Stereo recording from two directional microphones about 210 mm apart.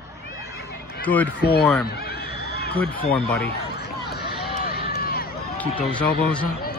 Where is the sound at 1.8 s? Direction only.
50° left (ahead or behind).